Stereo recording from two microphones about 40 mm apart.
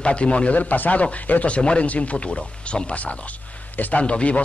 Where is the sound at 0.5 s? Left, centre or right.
Left.